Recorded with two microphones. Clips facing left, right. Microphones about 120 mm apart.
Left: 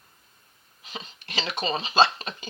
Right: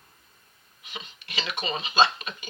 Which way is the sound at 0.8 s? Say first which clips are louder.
Left 2 dB; 35° left (ahead or behind).